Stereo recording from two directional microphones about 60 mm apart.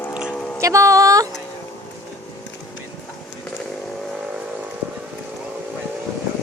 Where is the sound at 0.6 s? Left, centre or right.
Right.